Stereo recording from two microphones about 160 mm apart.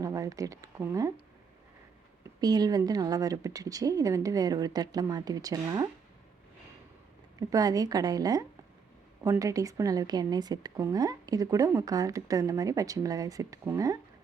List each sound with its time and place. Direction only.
0.0 s speech: 20° right (ahead or behind)
2.4 s a woman's voice: 25° right (ahead or behind)
7.3 s a woman's voice: 20° right (ahead or behind)